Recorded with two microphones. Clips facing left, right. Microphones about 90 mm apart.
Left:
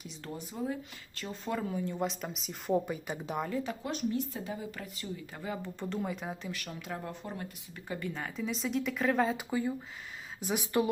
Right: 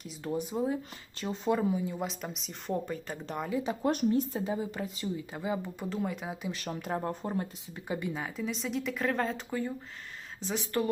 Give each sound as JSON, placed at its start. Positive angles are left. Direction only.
{"t": 0.2, "sound": "speech", "side_deg": -15}
{"t": 1.7, "sound": "a woman's voice", "side_deg": -5}
{"t": 4.3, "sound": "speech", "side_deg": -25}
{"t": 5.9, "sound": "a woman's voice", "side_deg": 0}
{"t": 6.7, "sound": "speech", "side_deg": -40}
{"t": 7.3, "sound": "speech", "side_deg": -20}
{"t": 8.2, "sound": "a woman's voice", "side_deg": 0}